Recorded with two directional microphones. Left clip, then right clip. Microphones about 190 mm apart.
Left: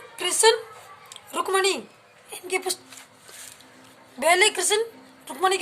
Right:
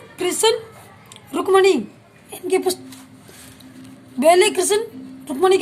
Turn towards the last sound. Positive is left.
turn(degrees=0)  # may be behind; listen again after turning